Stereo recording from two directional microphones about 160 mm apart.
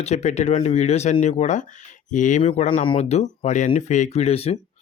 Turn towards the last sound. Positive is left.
turn(degrees=40)  # may be behind; listen again after turning